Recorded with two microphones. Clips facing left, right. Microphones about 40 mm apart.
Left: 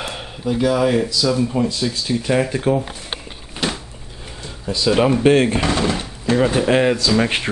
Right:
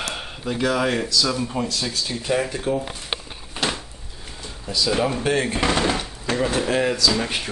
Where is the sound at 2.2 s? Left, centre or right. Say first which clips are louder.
Left 3 dB; centre.